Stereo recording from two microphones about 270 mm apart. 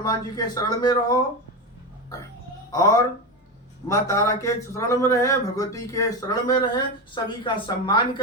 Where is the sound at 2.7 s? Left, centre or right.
Centre.